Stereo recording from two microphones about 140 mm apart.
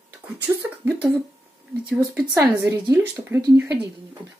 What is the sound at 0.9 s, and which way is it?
Speech, 10° right (ahead or behind).